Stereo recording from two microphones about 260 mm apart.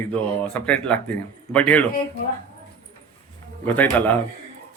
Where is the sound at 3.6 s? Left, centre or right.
Centre.